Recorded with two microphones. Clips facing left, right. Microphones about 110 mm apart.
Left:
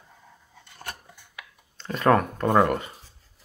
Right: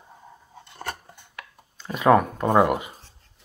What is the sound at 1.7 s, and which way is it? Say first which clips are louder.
Speech: right 3 dB; 10° right (ahead or behind).